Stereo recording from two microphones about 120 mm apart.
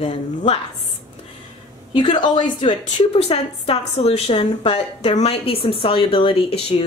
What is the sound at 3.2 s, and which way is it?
A woman's voice, 60° left (ahead or behind).